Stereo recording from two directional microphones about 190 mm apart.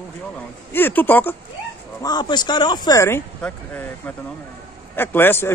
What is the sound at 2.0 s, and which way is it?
Speech, 20° left (ahead or behind).